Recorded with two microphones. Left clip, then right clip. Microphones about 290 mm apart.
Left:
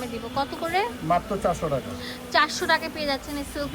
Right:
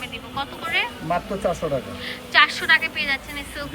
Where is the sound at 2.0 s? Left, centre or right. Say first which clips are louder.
Right 6 dB; centre.